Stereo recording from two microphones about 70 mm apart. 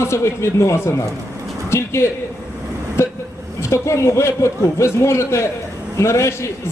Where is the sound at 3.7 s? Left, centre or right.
Left.